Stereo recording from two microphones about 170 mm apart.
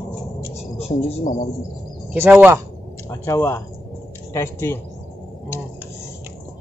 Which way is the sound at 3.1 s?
15° left (ahead or behind).